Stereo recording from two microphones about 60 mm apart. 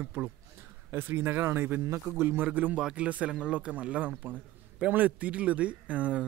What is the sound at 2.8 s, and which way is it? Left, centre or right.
Speech, centre.